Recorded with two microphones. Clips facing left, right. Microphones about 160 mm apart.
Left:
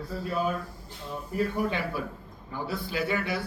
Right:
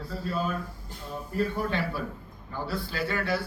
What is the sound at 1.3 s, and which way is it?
A man's voice, 15° left (ahead or behind).